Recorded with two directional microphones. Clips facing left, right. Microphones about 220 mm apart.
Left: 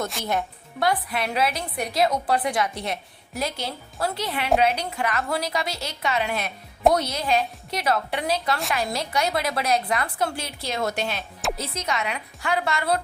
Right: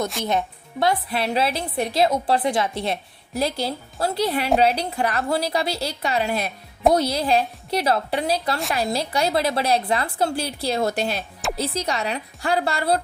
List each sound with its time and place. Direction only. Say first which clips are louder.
0.3 s a woman's voice: right 3 dB; 20° right (ahead or behind)